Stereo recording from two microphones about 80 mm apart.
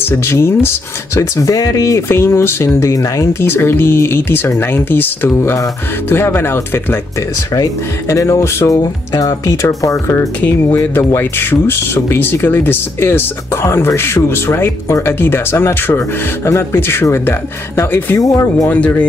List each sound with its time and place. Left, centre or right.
0.0 s speech: left
2.9 s speech: left
3.3 s speech: left
7.5 s speech: left
10.4 s speech: left
18.2 s speech: left
18.7 s speech: left